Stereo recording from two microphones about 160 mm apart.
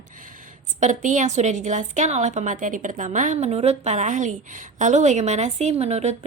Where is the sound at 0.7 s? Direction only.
50° right (ahead or behind).